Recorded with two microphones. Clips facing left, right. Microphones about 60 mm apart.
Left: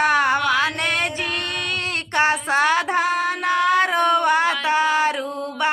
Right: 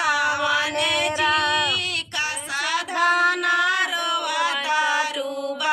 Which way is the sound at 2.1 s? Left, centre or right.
Left.